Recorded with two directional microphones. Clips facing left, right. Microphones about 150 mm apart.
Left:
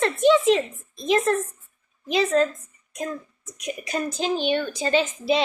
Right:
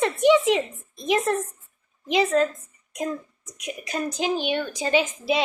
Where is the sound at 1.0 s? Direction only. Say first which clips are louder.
Left 2 dB; 15° right (ahead or behind).